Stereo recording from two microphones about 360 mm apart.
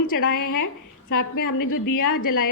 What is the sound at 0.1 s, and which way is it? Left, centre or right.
A woman's voice, left.